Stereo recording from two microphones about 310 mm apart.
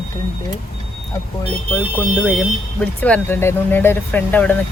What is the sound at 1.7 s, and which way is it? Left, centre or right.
Speech, centre.